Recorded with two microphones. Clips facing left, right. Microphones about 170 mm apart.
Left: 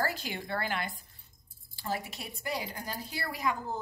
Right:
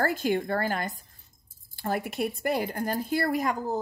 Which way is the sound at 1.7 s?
55° right (ahead or behind).